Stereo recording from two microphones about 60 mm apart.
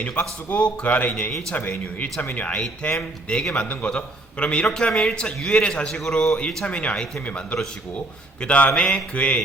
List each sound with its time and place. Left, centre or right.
0.2 s a man's voice: centre